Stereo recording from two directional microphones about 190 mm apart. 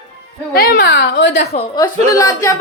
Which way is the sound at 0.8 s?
70° left (ahead or behind).